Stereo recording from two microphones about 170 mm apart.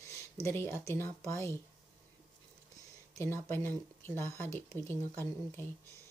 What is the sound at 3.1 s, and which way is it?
Speech, 15° left (ahead or behind).